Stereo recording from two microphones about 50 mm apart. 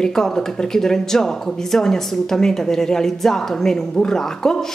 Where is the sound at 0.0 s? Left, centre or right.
Centre.